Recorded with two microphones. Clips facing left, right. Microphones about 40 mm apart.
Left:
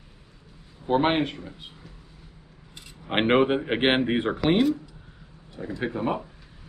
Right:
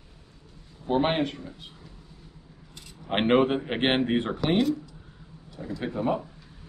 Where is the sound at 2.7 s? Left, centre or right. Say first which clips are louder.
Left 2 dB; centre.